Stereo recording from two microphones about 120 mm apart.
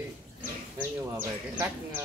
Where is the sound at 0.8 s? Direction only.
15° right (ahead or behind).